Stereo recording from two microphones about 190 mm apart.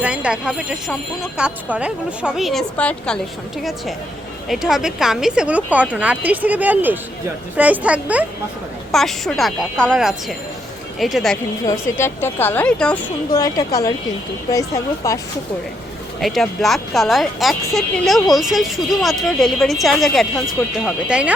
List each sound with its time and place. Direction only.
0.0 s speech: 5° right (ahead or behind)
11.6 s a woman's voice: 15° left (ahead or behind)
13.3 s a woman's voice: 15° left (ahead or behind)
15.0 s a woman's voice: 15° left (ahead or behind)
16.2 s speech: centre (ahead or behind)